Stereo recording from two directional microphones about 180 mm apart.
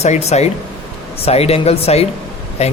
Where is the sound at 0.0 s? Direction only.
35° left (ahead or behind).